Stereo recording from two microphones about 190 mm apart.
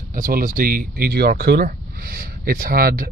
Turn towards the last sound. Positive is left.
turn(degrees=-50)  # may be behind; listen again after turning